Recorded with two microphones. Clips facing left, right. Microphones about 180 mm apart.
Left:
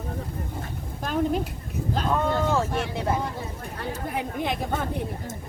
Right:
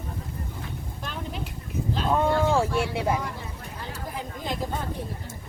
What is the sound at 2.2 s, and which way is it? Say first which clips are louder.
Speech: right 2 dB; 10° right (ahead or behind).